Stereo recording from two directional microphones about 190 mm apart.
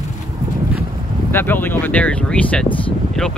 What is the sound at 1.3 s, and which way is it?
Speech, 10° left (ahead or behind).